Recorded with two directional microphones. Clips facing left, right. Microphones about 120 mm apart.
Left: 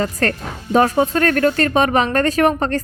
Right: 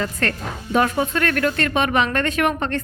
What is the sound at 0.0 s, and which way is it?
Speech, 35° left (ahead or behind).